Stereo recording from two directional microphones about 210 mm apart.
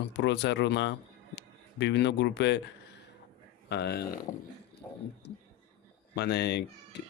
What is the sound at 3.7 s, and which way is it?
Speech, 50° left (ahead or behind).